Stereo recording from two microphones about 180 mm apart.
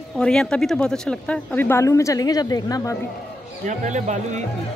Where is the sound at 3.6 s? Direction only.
40° right (ahead or behind).